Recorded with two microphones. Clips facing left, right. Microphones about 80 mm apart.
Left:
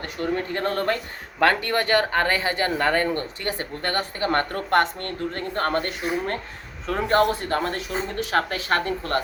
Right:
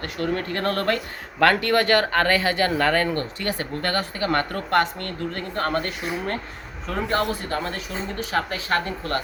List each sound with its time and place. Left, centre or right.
0.2 s speech: centre; by 8.8 s left